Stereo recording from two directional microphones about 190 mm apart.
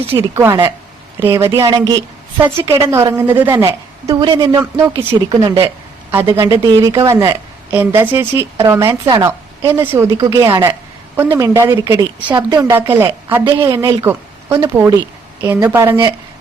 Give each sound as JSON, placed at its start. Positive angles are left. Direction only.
{"t": 0.2, "sound": "a woman's voice", "side_deg": -15}
{"t": 6.1, "sound": "a woman's voice", "side_deg": -10}
{"t": 9.7, "sound": "a woman's voice", "side_deg": -10}
{"t": 13.4, "sound": "a woman's voice", "side_deg": -25}